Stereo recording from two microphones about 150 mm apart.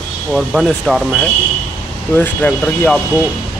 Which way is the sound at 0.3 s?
Centre (ahead or behind).